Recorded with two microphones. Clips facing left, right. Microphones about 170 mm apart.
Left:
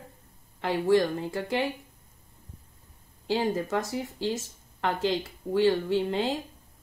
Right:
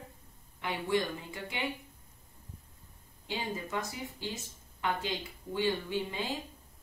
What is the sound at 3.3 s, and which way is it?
Speech, 65° left (ahead or behind).